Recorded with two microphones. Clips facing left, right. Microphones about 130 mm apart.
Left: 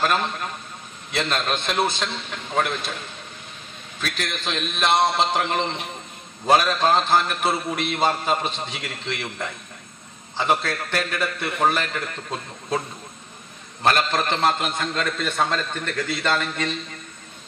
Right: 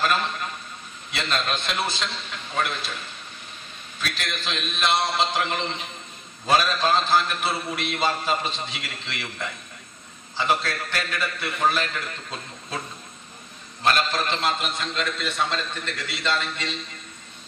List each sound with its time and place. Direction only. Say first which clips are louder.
1.1 s a man's voice: left 3 dB; 50° left (ahead or behind)
4.0 s a man's voice: left 2 dB; 45° left (ahead or behind)
13.8 s a man's voice: left 2 dB; 50° left (ahead or behind)